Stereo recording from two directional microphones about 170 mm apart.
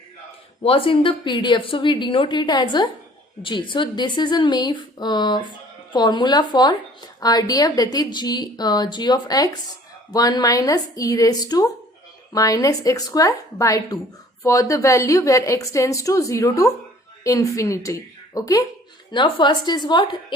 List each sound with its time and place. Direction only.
0.6 s speech: 35° left (ahead or behind)